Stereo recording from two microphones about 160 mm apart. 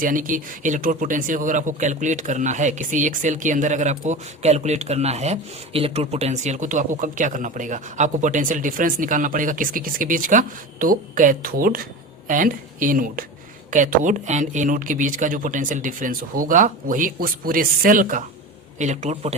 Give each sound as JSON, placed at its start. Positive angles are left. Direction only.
{"t": 0.0, "sound": "speech", "side_deg": -55}
{"t": 18.8, "sound": "speech", "side_deg": -45}